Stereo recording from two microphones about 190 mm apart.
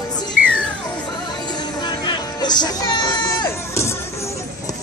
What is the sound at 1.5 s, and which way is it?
Music, 20° left (ahead or behind).